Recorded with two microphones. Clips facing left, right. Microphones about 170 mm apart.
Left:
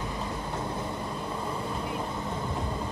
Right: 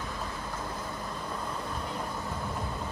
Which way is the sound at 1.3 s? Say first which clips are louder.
Left 3 dB; 5° left (ahead or behind).